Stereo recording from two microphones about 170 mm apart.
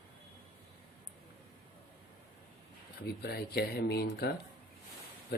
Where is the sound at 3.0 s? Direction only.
65° left (ahead or behind).